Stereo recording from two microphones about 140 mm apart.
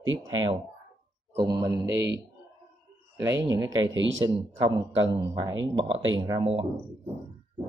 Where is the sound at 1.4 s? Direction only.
25° right (ahead or behind).